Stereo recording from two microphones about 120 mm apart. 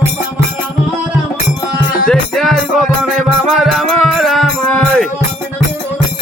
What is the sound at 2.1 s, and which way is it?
Music, centre (ahead or behind).